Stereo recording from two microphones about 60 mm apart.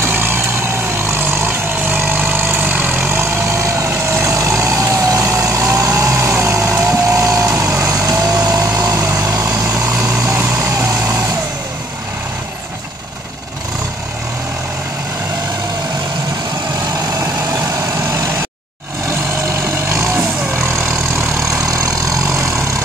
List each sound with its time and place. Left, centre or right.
0.0 s vehicle: right
7.8 s vehicle: right
8.9 s vehicle: right
17.2 s vehicle: right
19.9 s vehicle: right
21.4 s vehicle: right